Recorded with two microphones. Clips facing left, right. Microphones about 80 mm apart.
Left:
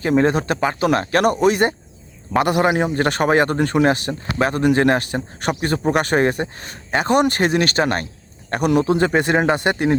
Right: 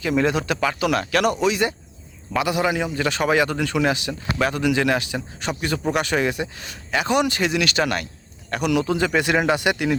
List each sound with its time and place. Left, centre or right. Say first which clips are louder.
0.0 s speech: left 4 dB; left